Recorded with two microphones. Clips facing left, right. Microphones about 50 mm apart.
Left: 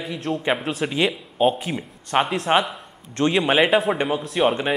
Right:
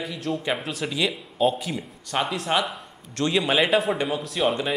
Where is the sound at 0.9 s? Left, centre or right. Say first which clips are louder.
Left 3 dB; left.